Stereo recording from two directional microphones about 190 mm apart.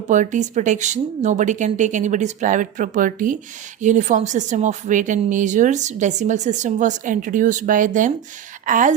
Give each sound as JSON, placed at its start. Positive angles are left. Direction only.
{"t": 0.1, "sound": "a woman's voice", "side_deg": -40}